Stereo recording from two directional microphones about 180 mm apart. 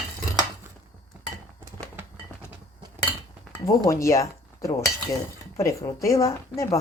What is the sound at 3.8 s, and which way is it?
Speech, 15° left (ahead or behind).